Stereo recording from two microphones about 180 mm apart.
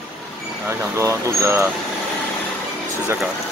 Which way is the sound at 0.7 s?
15° right (ahead or behind).